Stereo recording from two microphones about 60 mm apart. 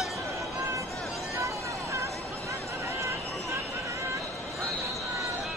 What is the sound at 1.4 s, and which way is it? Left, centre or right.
Vehicle, right.